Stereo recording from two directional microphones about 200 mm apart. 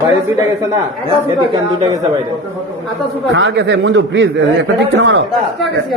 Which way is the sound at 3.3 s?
65° right (ahead or behind).